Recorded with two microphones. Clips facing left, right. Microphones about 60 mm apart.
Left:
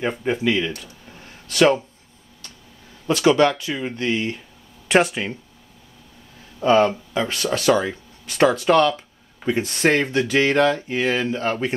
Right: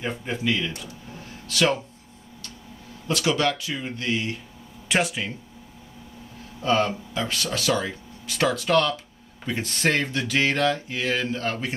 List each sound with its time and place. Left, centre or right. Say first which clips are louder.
0.2 s speech: left 5 dB; left
3.1 s speech: left 7 dB; left
6.6 s speech: left 6 dB; left